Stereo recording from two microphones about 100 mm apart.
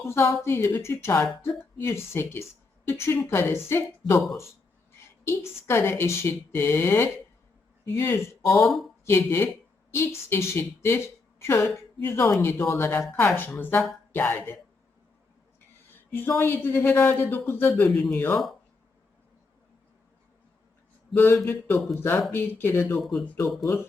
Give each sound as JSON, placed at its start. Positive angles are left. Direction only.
{"t": 0.0, "sound": "speech", "side_deg": 25}
{"t": 5.2, "sound": "a woman's voice", "side_deg": 25}
{"t": 12.9, "sound": "speech", "side_deg": 10}
{"t": 16.1, "sound": "speech", "side_deg": 20}
{"t": 21.2, "sound": "speech", "side_deg": 20}
{"t": 23.0, "sound": "speech", "side_deg": 0}